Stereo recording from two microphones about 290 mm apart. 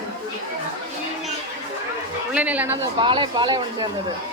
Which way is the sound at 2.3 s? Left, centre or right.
Centre.